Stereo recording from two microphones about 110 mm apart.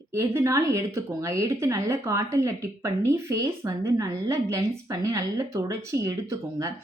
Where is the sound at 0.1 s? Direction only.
25° right (ahead or behind).